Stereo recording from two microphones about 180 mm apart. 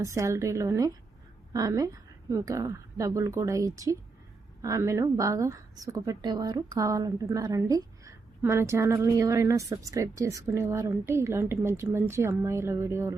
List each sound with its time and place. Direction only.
0.0 s a woman's voice: 15° right (ahead or behind)